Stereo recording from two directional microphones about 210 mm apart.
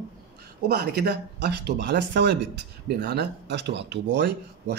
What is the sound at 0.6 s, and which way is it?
Speech, 50° right (ahead or behind).